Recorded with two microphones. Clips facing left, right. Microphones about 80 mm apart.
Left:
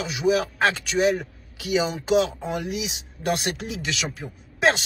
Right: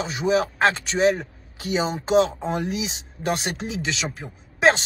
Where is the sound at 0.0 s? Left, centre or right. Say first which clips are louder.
Right 1 dB; right.